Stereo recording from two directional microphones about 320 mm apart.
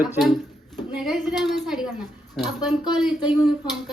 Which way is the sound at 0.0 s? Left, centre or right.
Centre.